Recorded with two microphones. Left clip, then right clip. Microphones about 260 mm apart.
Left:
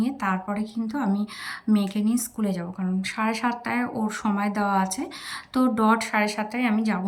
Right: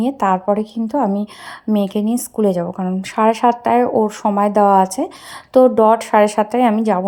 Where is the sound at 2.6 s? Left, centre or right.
Right.